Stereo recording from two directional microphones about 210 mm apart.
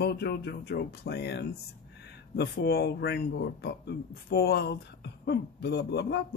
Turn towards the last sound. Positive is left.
turn(degrees=50)  # may be behind; listen again after turning